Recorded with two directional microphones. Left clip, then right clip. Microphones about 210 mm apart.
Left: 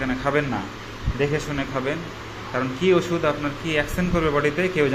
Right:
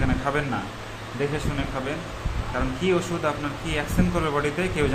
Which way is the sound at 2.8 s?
10° left (ahead or behind).